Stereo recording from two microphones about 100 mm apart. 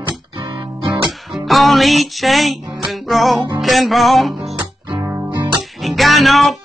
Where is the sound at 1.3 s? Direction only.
Centre (ahead or behind).